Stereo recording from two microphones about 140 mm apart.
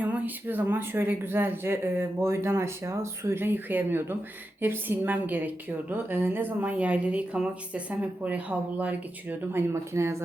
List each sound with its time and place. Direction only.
0.1 s a woman's voice: 15° right (ahead or behind)